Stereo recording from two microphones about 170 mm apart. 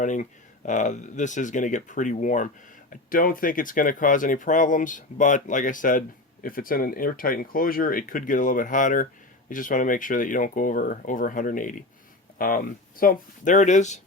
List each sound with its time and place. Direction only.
0.0 s speech: 45° left (ahead or behind)